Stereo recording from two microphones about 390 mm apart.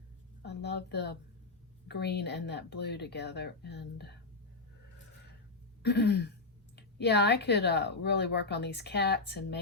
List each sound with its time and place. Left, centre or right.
0.4 s a woman's voice: left
5.8 s a woman's voice: left